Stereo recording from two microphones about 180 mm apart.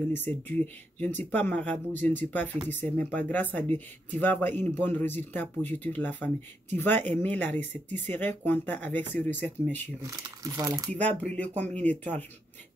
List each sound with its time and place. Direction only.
0.1 s speech: 10° left (ahead or behind)
10.0 s speech: 20° right (ahead or behind)
11.2 s speech: 10° left (ahead or behind)